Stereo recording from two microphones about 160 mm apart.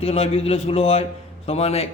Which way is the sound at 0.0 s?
40° left (ahead or behind).